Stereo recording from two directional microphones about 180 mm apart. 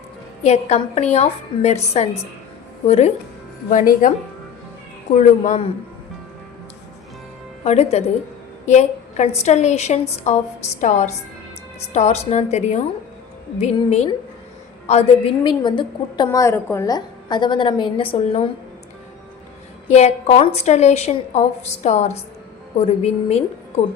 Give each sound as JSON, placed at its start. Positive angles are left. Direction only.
{"t": 0.4, "sound": "a woman's voice", "side_deg": 40}
{"t": 3.7, "sound": "speech", "side_deg": 50}
{"t": 5.1, "sound": "a woman's voice", "side_deg": 35}
{"t": 7.6, "sound": "a woman's voice", "side_deg": 35}
{"t": 15.4, "sound": "a woman's voice", "side_deg": 25}
{"t": 19.9, "sound": "a woman's voice", "side_deg": 40}